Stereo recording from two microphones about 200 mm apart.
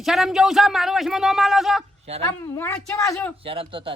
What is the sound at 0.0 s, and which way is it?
Speech, centre (ahead or behind).